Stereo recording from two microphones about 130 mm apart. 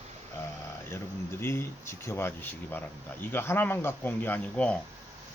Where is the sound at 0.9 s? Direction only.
20° left (ahead or behind).